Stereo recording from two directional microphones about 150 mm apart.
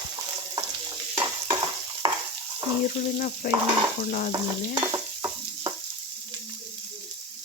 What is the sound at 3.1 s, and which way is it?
Frying, 60° left (ahead or behind).